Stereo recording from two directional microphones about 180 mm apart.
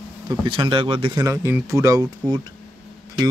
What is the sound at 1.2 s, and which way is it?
Speech, 15° right (ahead or behind).